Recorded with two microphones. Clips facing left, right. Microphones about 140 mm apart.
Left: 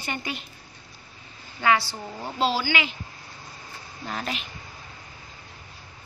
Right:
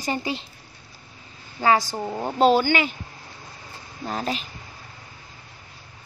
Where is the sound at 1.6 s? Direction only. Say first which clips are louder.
Right 3 dB; 40° right (ahead or behind).